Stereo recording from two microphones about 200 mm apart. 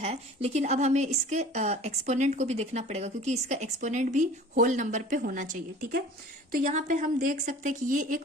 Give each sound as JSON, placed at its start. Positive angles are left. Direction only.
{"t": 0.0, "sound": "speech", "side_deg": -30}